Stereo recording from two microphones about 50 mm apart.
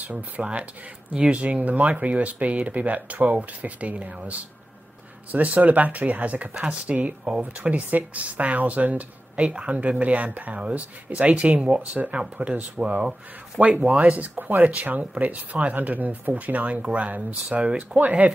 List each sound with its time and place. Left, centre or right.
0.0 s speech: right
17.6 s speech: centre
17.9 s speech: right